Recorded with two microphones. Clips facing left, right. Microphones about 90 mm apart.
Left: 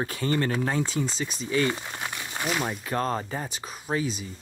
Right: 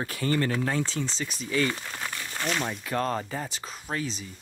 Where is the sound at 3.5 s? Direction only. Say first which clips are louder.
Left 4 dB; 10° left (ahead or behind).